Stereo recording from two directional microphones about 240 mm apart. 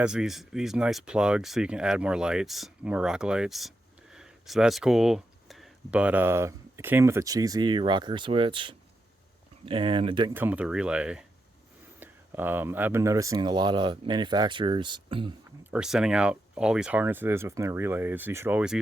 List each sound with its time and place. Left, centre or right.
0.0 s speech: centre
10.3 s speech: centre
15.6 s speech: centre